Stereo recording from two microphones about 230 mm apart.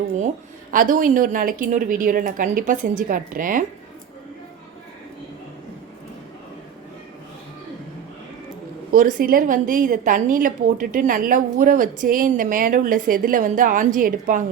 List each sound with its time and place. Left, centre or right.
0.7 s a woman's voice: right
8.9 s a woman's voice: right